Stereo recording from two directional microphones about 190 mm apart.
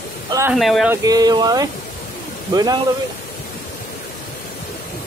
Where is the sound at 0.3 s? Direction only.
15° right (ahead or behind).